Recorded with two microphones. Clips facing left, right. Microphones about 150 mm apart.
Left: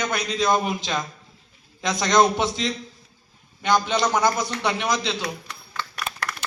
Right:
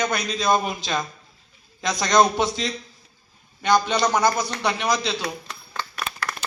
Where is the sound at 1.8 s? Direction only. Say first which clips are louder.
Even; 20° left (ahead or behind).